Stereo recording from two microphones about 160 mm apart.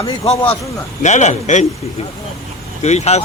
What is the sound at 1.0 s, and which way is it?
Speech, 45° left (ahead or behind).